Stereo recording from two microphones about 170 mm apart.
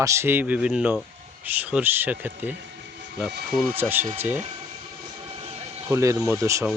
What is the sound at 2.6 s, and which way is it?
Train, 80° right.